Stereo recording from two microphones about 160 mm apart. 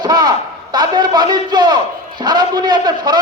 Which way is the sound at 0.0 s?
25° right (ahead or behind).